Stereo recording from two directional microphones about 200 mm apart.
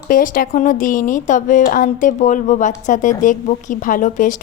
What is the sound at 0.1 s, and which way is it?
Speech, 45° left (ahead or behind).